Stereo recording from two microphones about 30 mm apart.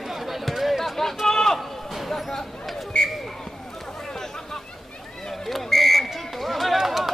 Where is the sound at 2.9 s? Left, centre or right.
Left.